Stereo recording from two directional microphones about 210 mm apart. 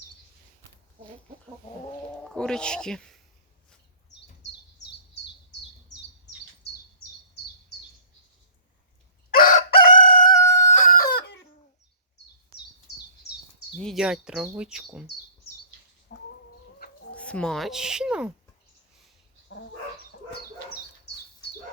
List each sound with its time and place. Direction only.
2.3 s speech: 5° left (ahead or behind)
9.3 s chicken: 40° left (ahead or behind)
10.0 s crowing: 40° left (ahead or behind)
10.4 s chicken: 35° left (ahead or behind)
13.7 s speech: centre (ahead or behind)
16.1 s chicken: 45° left (ahead or behind)
17.2 s speech: 5° left (ahead or behind)